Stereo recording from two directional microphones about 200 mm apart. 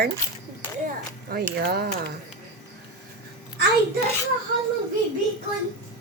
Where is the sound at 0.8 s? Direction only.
50° right (ahead or behind).